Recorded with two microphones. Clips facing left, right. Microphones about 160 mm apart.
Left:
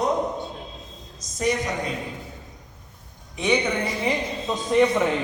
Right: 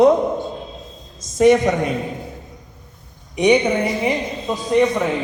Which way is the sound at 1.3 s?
55° right (ahead or behind).